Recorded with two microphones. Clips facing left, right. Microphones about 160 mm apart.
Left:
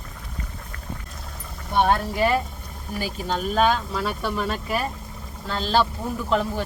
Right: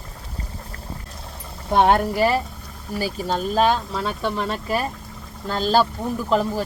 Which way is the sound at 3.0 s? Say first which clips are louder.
Right 3 dB; 35° right (ahead or behind).